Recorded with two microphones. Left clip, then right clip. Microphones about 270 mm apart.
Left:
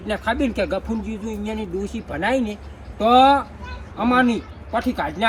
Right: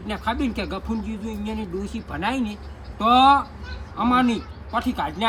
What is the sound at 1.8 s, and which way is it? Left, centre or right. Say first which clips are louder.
Speech: left 4 dB; centre.